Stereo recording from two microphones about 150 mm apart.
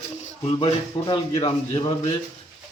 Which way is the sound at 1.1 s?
40° left (ahead or behind).